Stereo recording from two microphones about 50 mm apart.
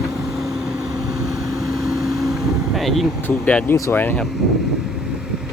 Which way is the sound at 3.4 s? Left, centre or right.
Left.